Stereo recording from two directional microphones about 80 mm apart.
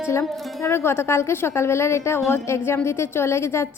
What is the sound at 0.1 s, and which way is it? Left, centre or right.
A woman's voice, left.